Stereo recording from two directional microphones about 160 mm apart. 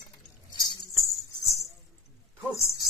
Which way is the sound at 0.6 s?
20° left (ahead or behind).